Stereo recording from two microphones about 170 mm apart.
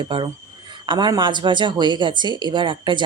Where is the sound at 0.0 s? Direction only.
30° right (ahead or behind).